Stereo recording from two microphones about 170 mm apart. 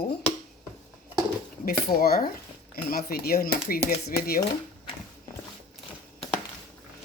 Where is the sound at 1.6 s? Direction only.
60° left (ahead or behind).